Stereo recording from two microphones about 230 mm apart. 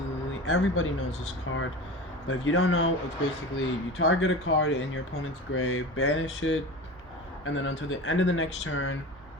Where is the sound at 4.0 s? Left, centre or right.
Left.